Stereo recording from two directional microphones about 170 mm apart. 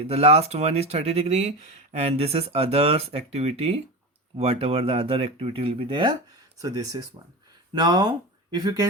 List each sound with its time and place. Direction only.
0.0 s speech: 35° right (ahead or behind); by 8.9 s 20° right (ahead or behind)